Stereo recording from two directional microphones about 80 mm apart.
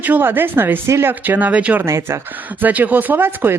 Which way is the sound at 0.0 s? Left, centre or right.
Right.